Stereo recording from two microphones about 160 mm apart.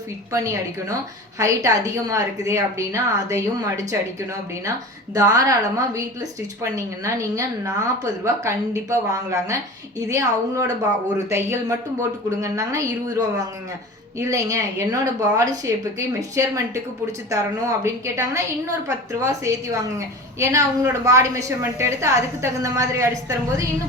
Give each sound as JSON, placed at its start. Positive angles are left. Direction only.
{"t": 0.3, "sound": "a woman's voice", "side_deg": -20}
{"t": 5.1, "sound": "a woman's voice", "side_deg": -20}